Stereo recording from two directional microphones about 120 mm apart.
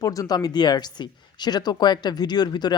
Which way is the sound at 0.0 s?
30° left (ahead or behind).